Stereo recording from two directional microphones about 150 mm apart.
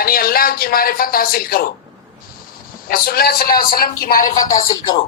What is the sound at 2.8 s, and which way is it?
A man's voice, 80° left.